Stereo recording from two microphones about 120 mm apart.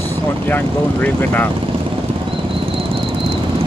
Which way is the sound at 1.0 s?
15° left (ahead or behind).